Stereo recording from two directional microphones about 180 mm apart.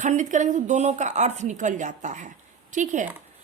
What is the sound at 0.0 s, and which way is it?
Speech, 45° right (ahead or behind).